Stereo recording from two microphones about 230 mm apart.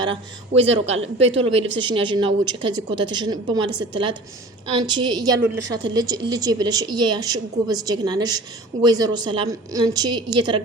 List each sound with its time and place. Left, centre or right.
0.0 s a woman's voice: right